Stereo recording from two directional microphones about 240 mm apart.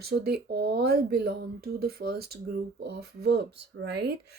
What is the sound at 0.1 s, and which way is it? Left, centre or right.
A woman's voice, right.